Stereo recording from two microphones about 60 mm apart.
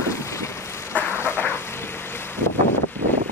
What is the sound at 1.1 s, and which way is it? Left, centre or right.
Vehicle, left.